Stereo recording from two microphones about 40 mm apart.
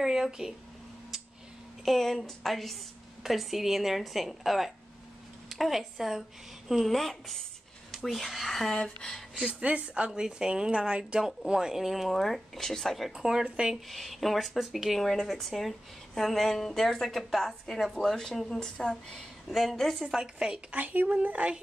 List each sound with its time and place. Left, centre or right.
0.0 s speech: centre
1.9 s a woman's voice: centre
6.8 s a woman's voice: centre
8.7 s speech: centre
9.4 s a woman's voice: right; by 12.9 s centre
12.9 s speech: centre
13.7 s a woman's voice: centre
15.0 s a woman's voice: centre
17.9 s speech: centre
19.5 s a woman's voice: centre
20.0 s speech: centre
20.7 s speech: right
21.1 s speech: right